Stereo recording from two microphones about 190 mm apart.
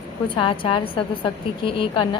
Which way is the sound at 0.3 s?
25° left (ahead or behind).